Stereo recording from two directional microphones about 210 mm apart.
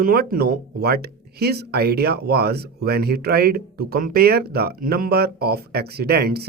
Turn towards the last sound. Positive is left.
turn(degrees=-50)  # may be behind; listen again after turning